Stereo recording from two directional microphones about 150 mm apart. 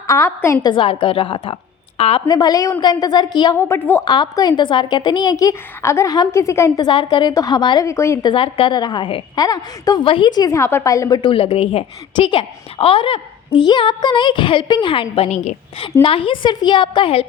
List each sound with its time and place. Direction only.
0.1 s a woman's voice: 20° left (ahead or behind)
0.7 s a woman's voice: 35° left (ahead or behind)
2.2 s a woman's voice: 25° left (ahead or behind)
3.6 s a woman's voice: 15° left (ahead or behind)
4.0 s a woman's voice: 30° left (ahead or behind)
6.8 s a woman's voice: 30° left (ahead or behind)
7.9 s a woman's voice: 20° left (ahead or behind)
8.3 s a woman's voice: 35° left (ahead or behind)
11.2 s a woman's voice: 35° left (ahead or behind)